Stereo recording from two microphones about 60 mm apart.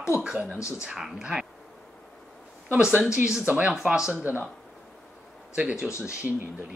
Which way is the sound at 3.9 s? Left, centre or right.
Centre.